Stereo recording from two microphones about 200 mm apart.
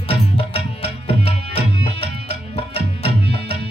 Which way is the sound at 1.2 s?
55° right (ahead or behind).